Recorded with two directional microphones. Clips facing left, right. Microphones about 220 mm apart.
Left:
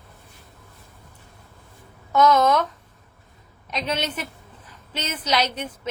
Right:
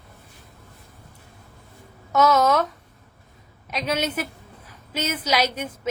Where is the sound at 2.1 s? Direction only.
10° right (ahead or behind).